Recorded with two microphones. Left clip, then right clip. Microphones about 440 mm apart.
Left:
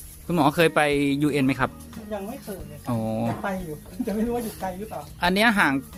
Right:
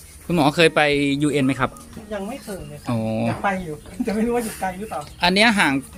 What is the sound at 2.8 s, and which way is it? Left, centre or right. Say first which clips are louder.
Speech: right 3 dB; left.